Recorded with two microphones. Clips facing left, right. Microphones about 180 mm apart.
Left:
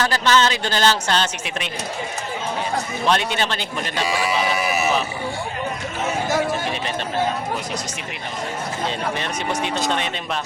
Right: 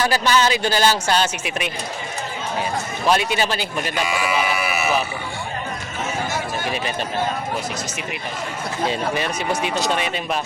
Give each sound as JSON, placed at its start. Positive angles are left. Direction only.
{"t": 0.0, "sound": "speech", "side_deg": -10}
{"t": 3.1, "sound": "speech", "side_deg": -5}
{"t": 4.0, "sound": "speech", "side_deg": 35}
{"t": 8.9, "sound": "speech", "side_deg": -10}